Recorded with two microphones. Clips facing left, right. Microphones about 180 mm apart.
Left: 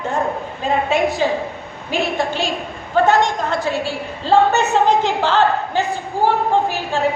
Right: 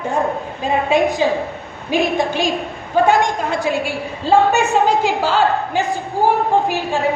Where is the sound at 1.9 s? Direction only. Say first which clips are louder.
Right 3 dB; 15° right (ahead or behind).